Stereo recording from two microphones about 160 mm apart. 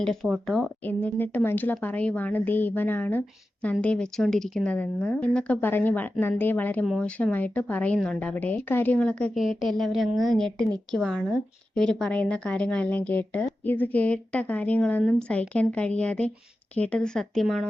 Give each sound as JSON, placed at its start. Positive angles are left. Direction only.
{"t": 0.0, "sound": "speech", "side_deg": 0}